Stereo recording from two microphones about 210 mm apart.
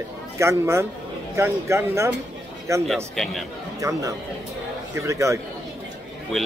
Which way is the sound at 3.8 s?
15° right (ahead or behind).